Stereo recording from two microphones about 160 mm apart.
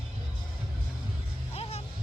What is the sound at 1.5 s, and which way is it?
Music, 40° left (ahead or behind).